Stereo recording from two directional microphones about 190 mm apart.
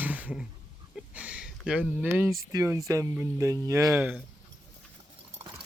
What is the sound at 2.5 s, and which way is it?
Speech, 15° right (ahead or behind).